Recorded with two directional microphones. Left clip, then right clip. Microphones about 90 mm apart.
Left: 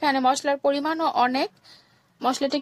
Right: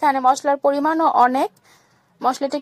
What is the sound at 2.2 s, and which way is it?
Speech, 25° left (ahead or behind).